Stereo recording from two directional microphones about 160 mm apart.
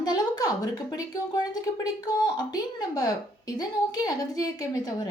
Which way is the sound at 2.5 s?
25° left (ahead or behind).